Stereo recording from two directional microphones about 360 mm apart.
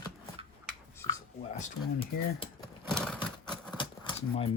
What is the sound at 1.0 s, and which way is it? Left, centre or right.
Writing, centre.